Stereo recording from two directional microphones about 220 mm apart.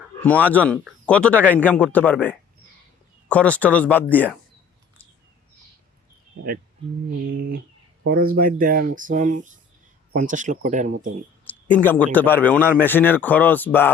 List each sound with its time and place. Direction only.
0.2 s speech: 5° left (ahead or behind)
7.3 s speech: 40° right (ahead or behind)
11.4 s a sound: 5° left (ahead or behind)
12.1 s speech: 10° left (ahead or behind)